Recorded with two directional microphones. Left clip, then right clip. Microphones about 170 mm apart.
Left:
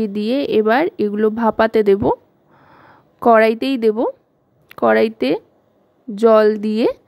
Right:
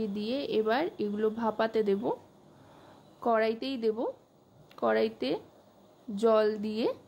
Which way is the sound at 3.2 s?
55° left (ahead or behind).